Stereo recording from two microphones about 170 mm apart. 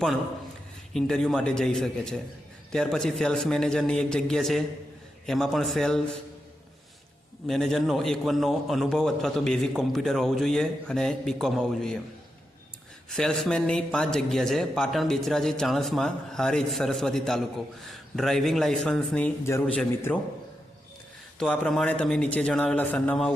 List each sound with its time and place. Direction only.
0.9 s a man's voice: 5° left (ahead or behind)
7.4 s a man's voice: centre (ahead or behind)
13.1 s a man's voice: 5° left (ahead or behind)
21.3 s a man's voice: 5° left (ahead or behind)